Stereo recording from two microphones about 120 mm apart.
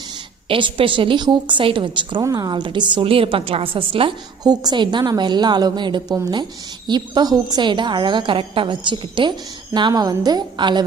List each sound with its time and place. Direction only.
0.4 s a woman's voice: 50° right (ahead or behind)
2.2 s a woman's voice: 30° right (ahead or behind); by 4.1 s 45° right (ahead or behind)
4.4 s a woman's voice: 35° right (ahead or behind)